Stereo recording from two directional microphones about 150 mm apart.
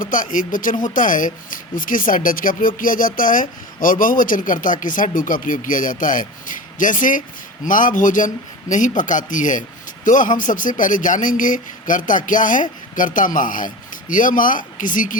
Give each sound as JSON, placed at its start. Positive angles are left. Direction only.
{"t": 0.0, "sound": "speech", "side_deg": 60}